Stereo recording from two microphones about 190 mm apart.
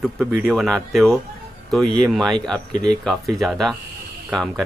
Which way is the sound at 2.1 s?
Centre (ahead or behind).